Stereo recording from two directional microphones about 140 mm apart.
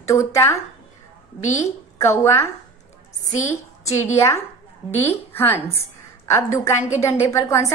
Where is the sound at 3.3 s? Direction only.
55° left (ahead or behind).